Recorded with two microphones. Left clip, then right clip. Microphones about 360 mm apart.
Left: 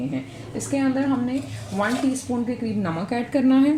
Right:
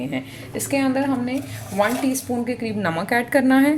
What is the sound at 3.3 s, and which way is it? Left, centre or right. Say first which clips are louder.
Speech: right 1 dB; right.